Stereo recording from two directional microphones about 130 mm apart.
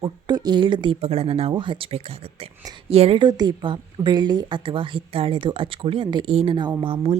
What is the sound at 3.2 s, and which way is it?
A woman's voice, 35° right (ahead or behind).